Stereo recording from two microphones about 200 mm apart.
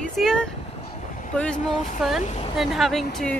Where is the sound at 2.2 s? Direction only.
35° left (ahead or behind).